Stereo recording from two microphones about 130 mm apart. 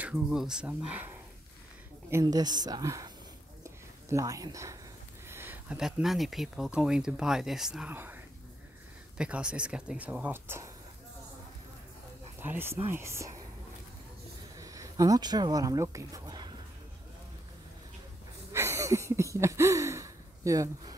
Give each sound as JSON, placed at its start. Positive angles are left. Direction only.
{"t": 0.0, "sound": "speech", "side_deg": -5}
{"t": 2.3, "sound": "a woman's voice", "side_deg": -30}
{"t": 3.6, "sound": "a sound", "side_deg": -25}
{"t": 5.8, "sound": "speech", "side_deg": -5}
{"t": 7.9, "sound": "speech", "side_deg": -15}
{"t": 9.2, "sound": "speech", "side_deg": -10}
{"t": 12.4, "sound": "speech", "side_deg": -15}
{"t": 14.6, "sound": "speech", "side_deg": -25}
{"t": 18.5, "sound": "a sound", "side_deg": -20}